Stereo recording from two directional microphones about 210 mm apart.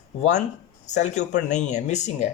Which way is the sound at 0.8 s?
35° left (ahead or behind).